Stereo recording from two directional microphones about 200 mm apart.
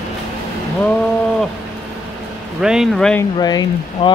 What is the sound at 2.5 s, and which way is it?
Speech, centre (ahead or behind).